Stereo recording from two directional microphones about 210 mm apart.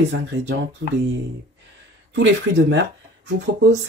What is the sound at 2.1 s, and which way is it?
Speech, 60° right (ahead or behind).